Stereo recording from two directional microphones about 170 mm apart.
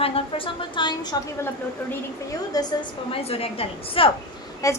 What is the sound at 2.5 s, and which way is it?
Speech, 20° left (ahead or behind).